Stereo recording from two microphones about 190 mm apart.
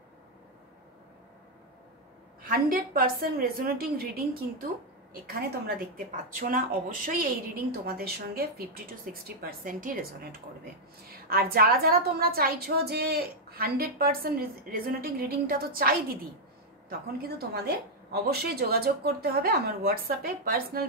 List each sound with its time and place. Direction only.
2.4 s a woman's voice: 50° right (ahead or behind)
17.2 s a woman's voice: 55° right (ahead or behind)